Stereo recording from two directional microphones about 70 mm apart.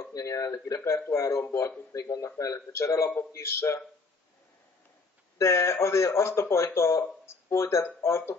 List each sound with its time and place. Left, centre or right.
0.0 s a man's voice: left
5.4 s speech: left